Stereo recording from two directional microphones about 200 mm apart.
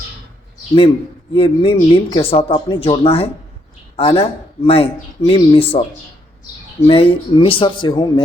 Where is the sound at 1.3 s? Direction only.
30° left (ahead or behind).